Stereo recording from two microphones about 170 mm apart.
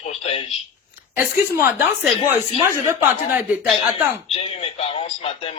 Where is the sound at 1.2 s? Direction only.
15° right (ahead or behind).